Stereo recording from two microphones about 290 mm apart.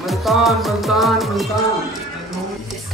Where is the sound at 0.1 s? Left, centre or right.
Centre.